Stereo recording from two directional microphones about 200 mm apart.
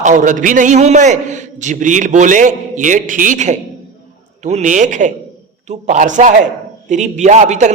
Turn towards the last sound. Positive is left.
turn(degrees=-35)  # may be behind; listen again after turning